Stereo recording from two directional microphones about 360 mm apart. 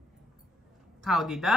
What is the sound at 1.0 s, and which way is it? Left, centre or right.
Speech, centre.